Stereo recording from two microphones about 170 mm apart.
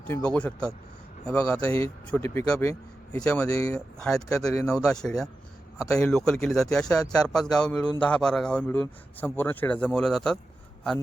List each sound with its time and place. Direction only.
0.1 s speech: 10° left (ahead or behind)
3.5 s speech: 20° left (ahead or behind)
3.8 s a man's voice: 5° left (ahead or behind)